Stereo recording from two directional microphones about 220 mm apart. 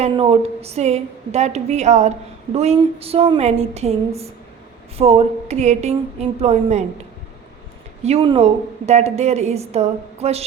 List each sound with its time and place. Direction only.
0.0 s a woman's voice: 25° right (ahead or behind)
4.9 s a woman's voice: 30° right (ahead or behind)
8.0 s a woman's voice: 25° right (ahead or behind)